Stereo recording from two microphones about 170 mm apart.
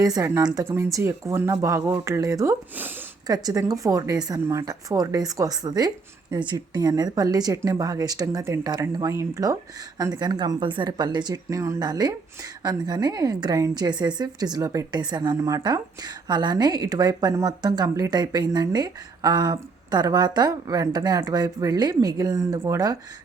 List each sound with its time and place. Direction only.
0.0 s a woman's voice: 20° right (ahead or behind)